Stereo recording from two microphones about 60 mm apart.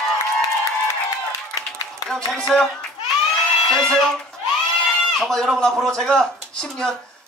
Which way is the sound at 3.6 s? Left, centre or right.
Centre.